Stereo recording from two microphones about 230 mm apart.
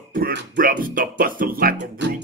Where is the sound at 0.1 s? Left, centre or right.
Right.